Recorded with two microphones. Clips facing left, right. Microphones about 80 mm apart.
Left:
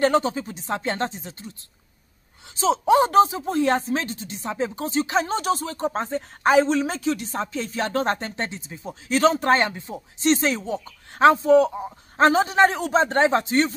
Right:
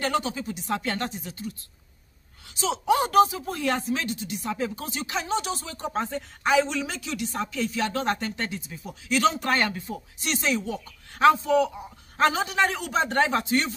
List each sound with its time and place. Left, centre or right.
0.0 s speech: left
2.5 s speech: left